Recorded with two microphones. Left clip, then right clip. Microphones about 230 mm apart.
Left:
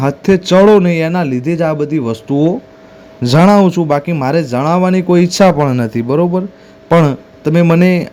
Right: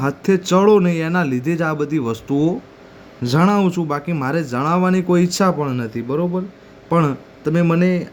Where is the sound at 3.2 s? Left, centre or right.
Left.